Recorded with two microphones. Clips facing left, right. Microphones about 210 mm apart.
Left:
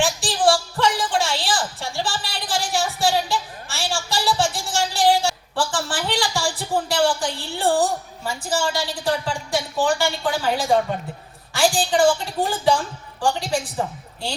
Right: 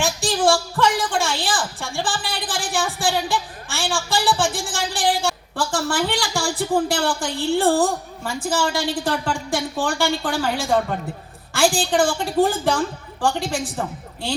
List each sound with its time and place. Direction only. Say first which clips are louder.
0.0 s music: even; 45° right (ahead or behind)
0.4 s a sound: even; 45° right (ahead or behind)
9.8 s a woman's voice: left 3 dB; 45° right (ahead or behind)